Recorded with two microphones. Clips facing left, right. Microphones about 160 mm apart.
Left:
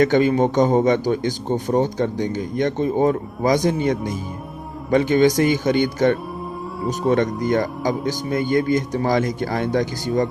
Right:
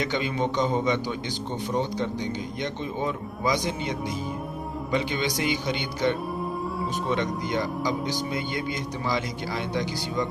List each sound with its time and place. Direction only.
0.0 s a man's voice: 50° left (ahead or behind)